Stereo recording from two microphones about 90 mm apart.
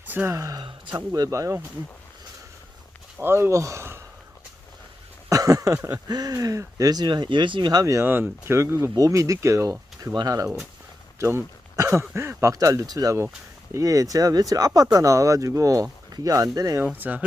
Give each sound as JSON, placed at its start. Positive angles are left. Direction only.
{"t": 0.1, "sound": "speech", "side_deg": -20}
{"t": 0.3, "sound": "speech", "side_deg": -35}
{"t": 0.6, "sound": "a man's voice", "side_deg": -55}
{"t": 1.3, "sound": "speech", "side_deg": -35}
{"t": 3.2, "sound": "speech", "side_deg": -25}
{"t": 5.3, "sound": "a sound", "side_deg": -40}
{"t": 6.1, "sound": "speech", "side_deg": -45}
{"t": 8.0, "sound": "speech", "side_deg": -25}
{"t": 11.2, "sound": "speech", "side_deg": -30}
{"t": 16.8, "sound": "speech", "side_deg": -20}